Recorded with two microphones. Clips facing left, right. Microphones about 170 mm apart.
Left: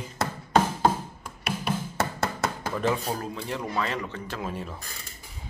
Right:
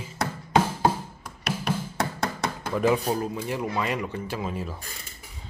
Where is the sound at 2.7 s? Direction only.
10° right (ahead or behind).